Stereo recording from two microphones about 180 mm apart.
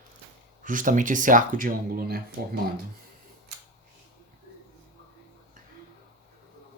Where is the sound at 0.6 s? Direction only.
45° right (ahead or behind).